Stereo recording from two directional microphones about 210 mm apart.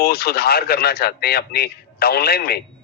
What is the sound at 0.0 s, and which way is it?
Speech, 50° left (ahead or behind).